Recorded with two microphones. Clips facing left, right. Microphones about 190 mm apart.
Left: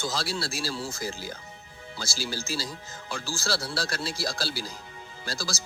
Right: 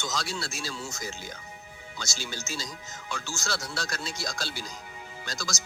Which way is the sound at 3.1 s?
35° left (ahead or behind).